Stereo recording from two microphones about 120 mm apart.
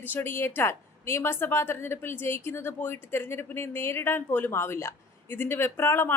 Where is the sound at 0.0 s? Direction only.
15° left (ahead or behind).